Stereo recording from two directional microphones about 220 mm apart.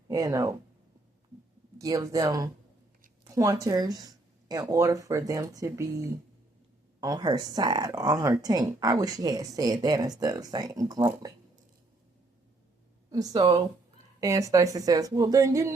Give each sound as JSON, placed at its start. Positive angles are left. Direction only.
{"t": 0.1, "sound": "speech", "side_deg": -15}
{"t": 1.8, "sound": "speech", "side_deg": -15}
{"t": 13.1, "sound": "speech", "side_deg": -15}